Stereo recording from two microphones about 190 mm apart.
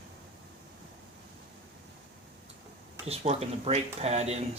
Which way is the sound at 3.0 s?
35° right (ahead or behind).